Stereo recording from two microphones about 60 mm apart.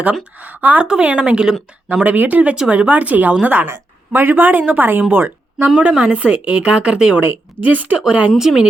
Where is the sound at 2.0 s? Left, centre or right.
Right.